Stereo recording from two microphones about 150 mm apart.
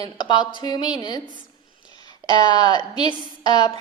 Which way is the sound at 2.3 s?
30° left (ahead or behind).